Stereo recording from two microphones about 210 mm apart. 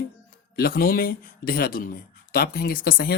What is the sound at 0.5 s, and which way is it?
Speech, 45° left (ahead or behind).